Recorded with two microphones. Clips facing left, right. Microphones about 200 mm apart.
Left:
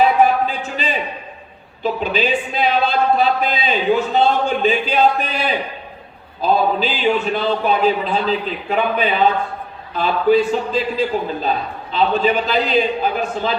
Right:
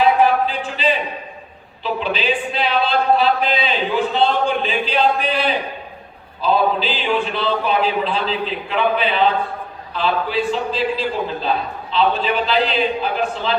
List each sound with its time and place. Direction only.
0.2 s a sound: 45° left (ahead or behind)
1.8 s speech: 45° left (ahead or behind)
6.4 s speech: 45° left (ahead or behind)